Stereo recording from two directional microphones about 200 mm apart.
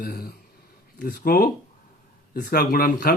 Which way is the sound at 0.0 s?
50° left (ahead or behind).